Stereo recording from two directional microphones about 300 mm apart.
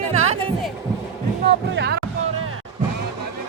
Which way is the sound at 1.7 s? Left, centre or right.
Right.